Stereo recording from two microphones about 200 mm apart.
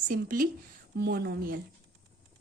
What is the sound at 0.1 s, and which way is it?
Speech, 45° right (ahead or behind).